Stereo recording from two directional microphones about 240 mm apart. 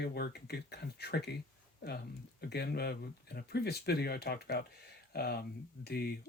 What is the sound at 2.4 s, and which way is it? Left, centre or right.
Speech, left.